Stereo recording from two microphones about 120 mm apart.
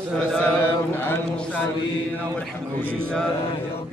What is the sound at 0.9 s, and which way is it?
Music, 20° left (ahead or behind).